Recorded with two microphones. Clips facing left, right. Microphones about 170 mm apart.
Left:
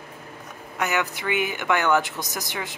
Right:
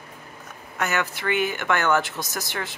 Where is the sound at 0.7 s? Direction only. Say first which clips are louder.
Left 1 dB; 15° left (ahead or behind).